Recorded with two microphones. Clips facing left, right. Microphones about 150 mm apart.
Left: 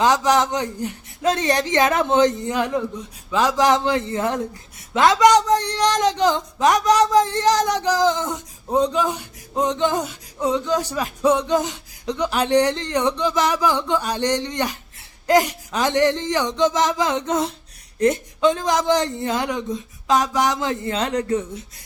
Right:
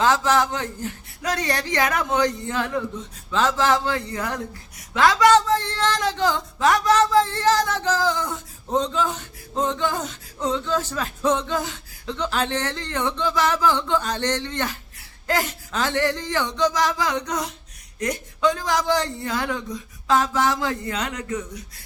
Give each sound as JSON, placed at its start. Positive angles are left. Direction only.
{"t": 0.0, "sound": "speech", "side_deg": 15}